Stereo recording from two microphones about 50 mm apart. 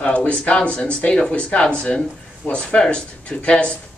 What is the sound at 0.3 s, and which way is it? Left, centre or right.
Speech, left.